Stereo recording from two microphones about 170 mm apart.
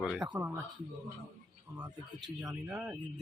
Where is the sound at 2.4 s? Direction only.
10° right (ahead or behind).